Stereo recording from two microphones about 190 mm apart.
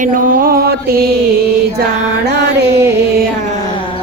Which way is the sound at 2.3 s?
60° right (ahead or behind).